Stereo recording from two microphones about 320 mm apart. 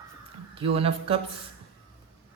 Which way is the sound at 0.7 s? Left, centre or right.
Centre.